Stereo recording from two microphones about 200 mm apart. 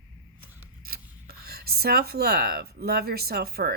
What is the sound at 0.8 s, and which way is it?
Speech, 50° right (ahead or behind).